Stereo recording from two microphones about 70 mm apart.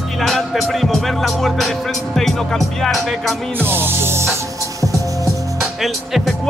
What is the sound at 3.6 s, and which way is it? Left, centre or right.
Music, right.